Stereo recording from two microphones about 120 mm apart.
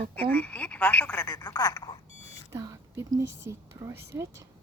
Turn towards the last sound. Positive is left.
turn(degrees=-25)  # may be behind; listen again after turning